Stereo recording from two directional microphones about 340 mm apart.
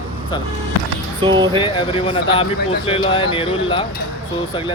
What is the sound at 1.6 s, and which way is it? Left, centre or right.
Speech, centre.